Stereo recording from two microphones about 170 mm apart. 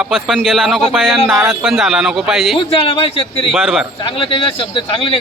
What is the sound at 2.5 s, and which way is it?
Speech, 30° left (ahead or behind).